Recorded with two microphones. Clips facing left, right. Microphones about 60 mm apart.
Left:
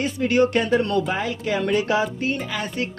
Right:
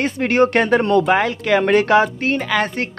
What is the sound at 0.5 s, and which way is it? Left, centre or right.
Speech, right.